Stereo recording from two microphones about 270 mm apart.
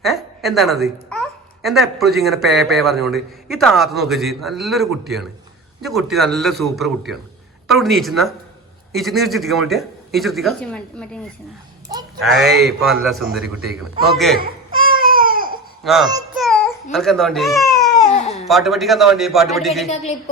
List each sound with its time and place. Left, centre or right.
0.0 s speech: centre
12.2 s speech: centre
14.7 s baby cry: centre
15.8 s a child's voice: centre
16.3 s baby cry: centre
18.0 s baby cry: left
18.4 s speech: centre